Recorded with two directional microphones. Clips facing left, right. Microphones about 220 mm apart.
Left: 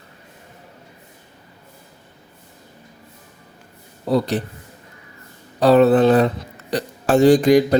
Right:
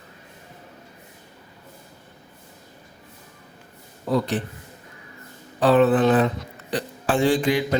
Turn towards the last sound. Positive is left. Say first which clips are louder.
# left 8 dB
turn(degrees=40)  # may be behind; listen again after turning